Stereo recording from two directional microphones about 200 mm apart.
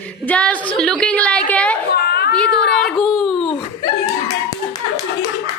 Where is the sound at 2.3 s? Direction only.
5° left (ahead or behind).